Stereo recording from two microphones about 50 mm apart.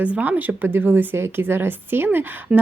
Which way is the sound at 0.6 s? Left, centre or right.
Right.